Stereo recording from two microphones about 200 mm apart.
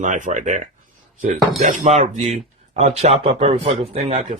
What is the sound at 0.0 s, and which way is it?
Speech, 40° right (ahead or behind).